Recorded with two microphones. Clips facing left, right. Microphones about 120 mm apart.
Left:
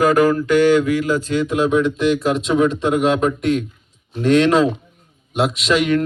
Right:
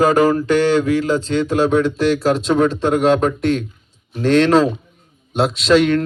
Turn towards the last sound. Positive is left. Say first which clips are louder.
# right 3 dB
turn(degrees=-30)  # may be behind; listen again after turning